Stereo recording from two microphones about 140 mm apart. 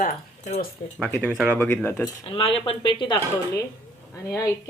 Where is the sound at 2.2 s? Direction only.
40° left (ahead or behind).